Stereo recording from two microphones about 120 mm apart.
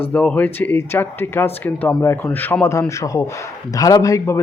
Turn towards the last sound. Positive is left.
turn(degrees=25)  # may be behind; listen again after turning